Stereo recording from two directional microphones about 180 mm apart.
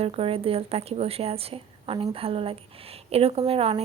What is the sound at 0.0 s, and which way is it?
Speech, 30° right (ahead or behind).